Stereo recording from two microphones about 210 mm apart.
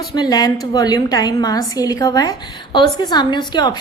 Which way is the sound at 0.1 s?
20° left (ahead or behind).